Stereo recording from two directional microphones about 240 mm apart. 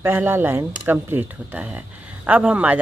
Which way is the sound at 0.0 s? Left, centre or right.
Centre.